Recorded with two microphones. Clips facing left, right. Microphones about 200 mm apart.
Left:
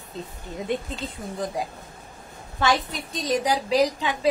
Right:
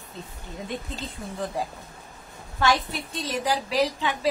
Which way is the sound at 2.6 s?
20° left (ahead or behind).